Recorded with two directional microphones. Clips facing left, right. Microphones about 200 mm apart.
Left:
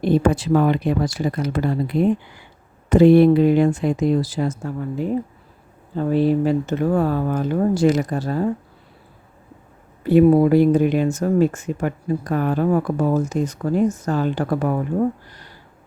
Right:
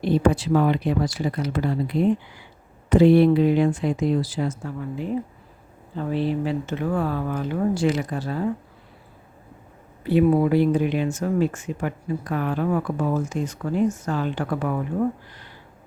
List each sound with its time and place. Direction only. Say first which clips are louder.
0.0 s speech: left 2 dB; 50° left (ahead or behind)
10.0 s speech: left 5 dB; 45° left (ahead or behind)